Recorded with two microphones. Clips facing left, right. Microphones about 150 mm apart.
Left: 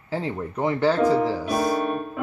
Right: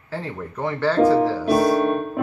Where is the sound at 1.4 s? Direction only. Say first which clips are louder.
Right 5 dB; 40° right (ahead or behind).